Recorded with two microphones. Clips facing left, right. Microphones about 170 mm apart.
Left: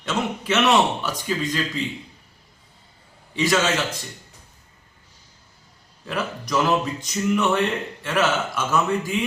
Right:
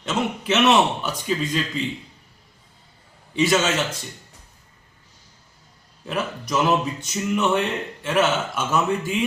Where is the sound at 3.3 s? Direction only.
25° right (ahead or behind).